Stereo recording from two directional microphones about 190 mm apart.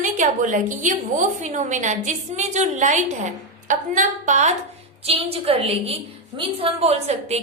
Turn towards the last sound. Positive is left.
turn(degrees=-35)  # may be behind; listen again after turning